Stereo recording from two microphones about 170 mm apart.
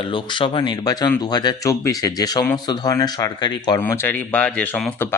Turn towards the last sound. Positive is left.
turn(degrees=10)  # may be behind; listen again after turning